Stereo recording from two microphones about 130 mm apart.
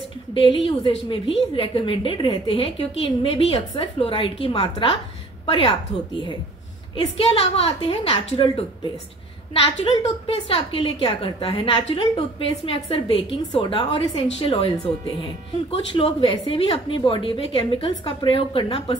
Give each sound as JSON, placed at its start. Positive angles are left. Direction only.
{"t": 0.3, "sound": "a woman's voice", "side_deg": 40}
{"t": 7.2, "sound": "a woman's voice", "side_deg": 50}
{"t": 15.9, "sound": "a woman's voice", "side_deg": 40}